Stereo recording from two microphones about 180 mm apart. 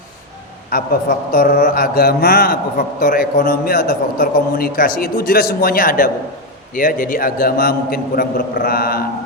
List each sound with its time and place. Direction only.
0.7 s a man's voice: 55° left (ahead or behind)